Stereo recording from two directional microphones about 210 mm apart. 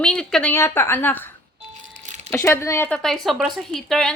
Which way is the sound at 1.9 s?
35° right (ahead or behind).